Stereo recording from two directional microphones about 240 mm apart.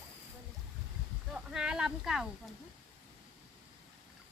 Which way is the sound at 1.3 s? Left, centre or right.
Centre.